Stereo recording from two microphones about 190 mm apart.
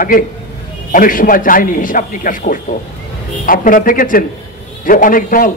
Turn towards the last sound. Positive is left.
turn(degrees=45)  # may be behind; listen again after turning